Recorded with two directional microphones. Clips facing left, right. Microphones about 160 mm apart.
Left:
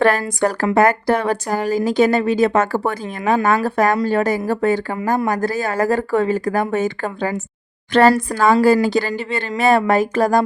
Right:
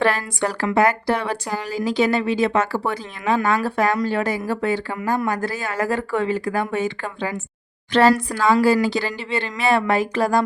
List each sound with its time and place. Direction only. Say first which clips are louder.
0.0 s speech: left 5 dB; 45° left (ahead or behind)